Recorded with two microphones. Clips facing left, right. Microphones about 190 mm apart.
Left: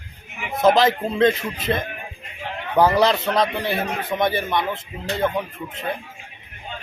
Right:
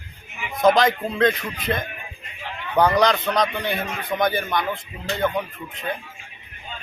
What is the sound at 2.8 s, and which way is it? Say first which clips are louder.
Speech: left 1 dB; 5° left (ahead or behind).